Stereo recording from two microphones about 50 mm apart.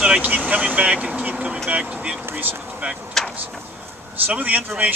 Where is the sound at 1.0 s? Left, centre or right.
Right.